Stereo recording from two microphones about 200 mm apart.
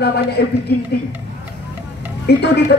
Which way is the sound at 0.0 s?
55° left (ahead or behind).